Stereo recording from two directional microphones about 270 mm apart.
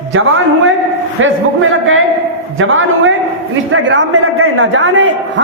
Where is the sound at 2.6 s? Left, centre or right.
Right.